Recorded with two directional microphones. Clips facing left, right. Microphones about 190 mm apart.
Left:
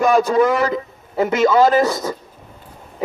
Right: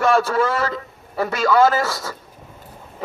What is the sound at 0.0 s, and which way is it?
A man's voice, 15° left (ahead or behind).